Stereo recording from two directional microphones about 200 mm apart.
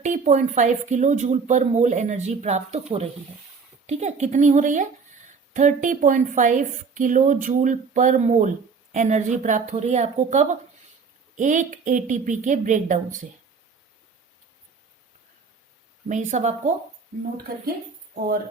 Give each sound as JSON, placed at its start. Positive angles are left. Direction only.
{"t": 0.0, "sound": "a woman's voice", "side_deg": -35}
{"t": 16.0, "sound": "a woman's voice", "side_deg": -35}